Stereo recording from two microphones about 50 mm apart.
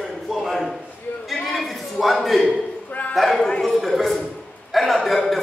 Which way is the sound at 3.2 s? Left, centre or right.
Centre.